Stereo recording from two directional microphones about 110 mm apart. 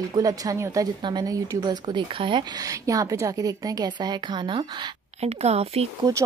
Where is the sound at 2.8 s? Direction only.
30° right (ahead or behind).